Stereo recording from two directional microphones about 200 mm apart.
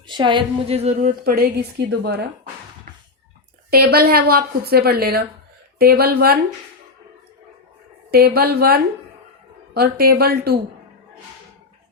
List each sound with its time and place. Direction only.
0.1 s speech: 25° right (ahead or behind)
1.2 s a woman's voice: 50° right (ahead or behind)
3.7 s a woman's voice: 50° right (ahead or behind)
8.1 s a woman's voice: 50° right (ahead or behind)